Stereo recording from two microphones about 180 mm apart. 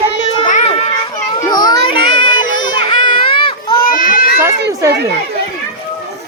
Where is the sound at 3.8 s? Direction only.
50° left (ahead or behind).